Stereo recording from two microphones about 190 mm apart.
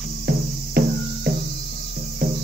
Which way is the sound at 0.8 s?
55° right (ahead or behind).